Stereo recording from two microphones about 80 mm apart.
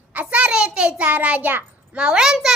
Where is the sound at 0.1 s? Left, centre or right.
Centre.